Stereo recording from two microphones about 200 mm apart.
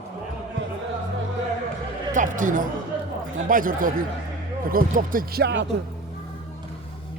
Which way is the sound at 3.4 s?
45° right (ahead or behind).